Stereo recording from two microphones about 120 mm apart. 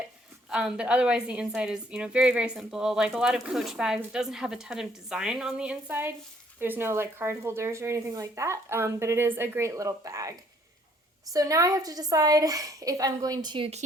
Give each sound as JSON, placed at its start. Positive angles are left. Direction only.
{"t": 0.5, "sound": "a woman's voice", "side_deg": -5}
{"t": 5.9, "sound": "speech", "side_deg": -20}
{"t": 11.3, "sound": "a woman's voice", "side_deg": -30}